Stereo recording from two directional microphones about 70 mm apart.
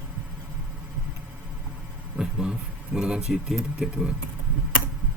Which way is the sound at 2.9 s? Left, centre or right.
Centre.